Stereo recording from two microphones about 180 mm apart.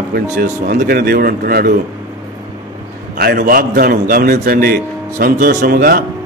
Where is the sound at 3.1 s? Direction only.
60° right (ahead or behind).